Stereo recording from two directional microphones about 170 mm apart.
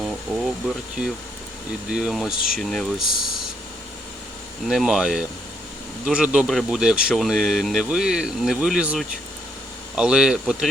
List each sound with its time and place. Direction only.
0.0 s a sound: centre (ahead or behind)
1.0 s speech: 5° right (ahead or behind)
4.7 s speech: 5° right (ahead or behind)